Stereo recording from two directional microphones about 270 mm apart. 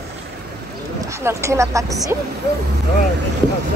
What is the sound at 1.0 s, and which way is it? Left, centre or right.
Speech, centre.